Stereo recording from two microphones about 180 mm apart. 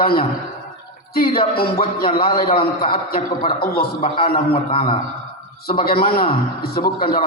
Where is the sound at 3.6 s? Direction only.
60° left (ahead or behind).